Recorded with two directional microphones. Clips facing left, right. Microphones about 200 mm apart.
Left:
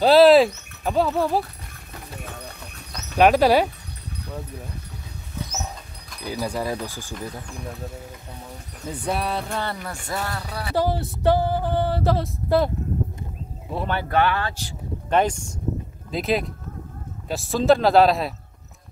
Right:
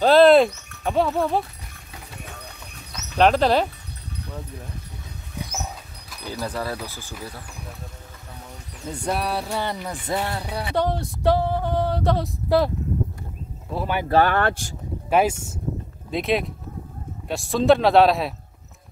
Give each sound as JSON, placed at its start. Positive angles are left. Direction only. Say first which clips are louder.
{"t": 0.0, "sound": "speech", "louder": "even", "side_deg": 5}
{"t": 3.2, "sound": "speech", "louder": "left 2 dB", "side_deg": 10}
{"t": 6.2, "sound": "speech", "louder": "left 2 dB", "side_deg": 15}
{"t": 8.8, "sound": "music", "louder": "even", "side_deg": 5}
{"t": 10.7, "sound": "a sound", "louder": "left 1 dB", "side_deg": 5}
{"t": 13.7, "sound": "speech", "louder": "even", "side_deg": 0}
{"t": 14.0, "sound": "speech", "louder": "right 3 dB", "side_deg": -35}
{"t": 14.3, "sound": "speech", "louder": "right 5 dB", "side_deg": -55}
{"t": 15.0, "sound": "speech", "louder": "right 1 dB", "side_deg": -5}
{"t": 16.1, "sound": "a sound", "louder": "right 1 dB", "side_deg": 0}